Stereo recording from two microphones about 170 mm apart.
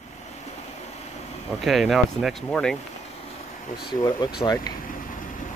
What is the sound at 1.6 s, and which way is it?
Speech, centre (ahead or behind).